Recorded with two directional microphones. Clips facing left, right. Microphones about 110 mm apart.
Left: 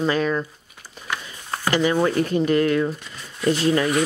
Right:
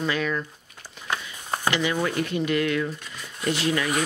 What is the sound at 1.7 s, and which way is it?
Speech, 40° left (ahead or behind).